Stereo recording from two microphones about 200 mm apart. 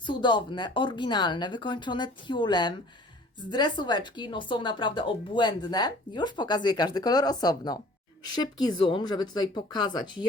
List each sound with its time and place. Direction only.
0.0 s speech: 25° left (ahead or behind)
8.9 s speech: 20° left (ahead or behind)